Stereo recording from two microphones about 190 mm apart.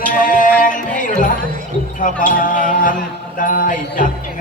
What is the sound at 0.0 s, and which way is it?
Music, 45° left (ahead or behind).